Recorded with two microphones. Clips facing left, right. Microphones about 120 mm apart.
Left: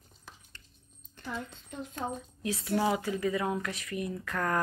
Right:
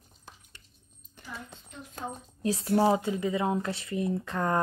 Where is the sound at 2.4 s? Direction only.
40° right (ahead or behind).